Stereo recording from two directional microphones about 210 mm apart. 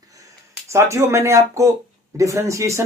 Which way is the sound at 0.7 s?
15° right (ahead or behind).